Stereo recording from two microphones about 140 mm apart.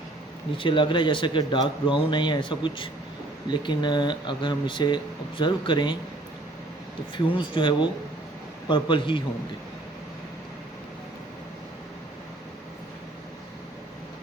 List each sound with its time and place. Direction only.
0.5 s speech: 35° left (ahead or behind)
7.3 s speech: 35° left (ahead or behind)